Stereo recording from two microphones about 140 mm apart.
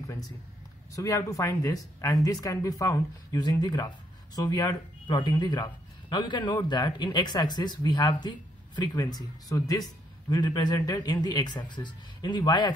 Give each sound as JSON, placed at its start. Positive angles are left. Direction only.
{"t": 0.9, "sound": "speech", "side_deg": 25}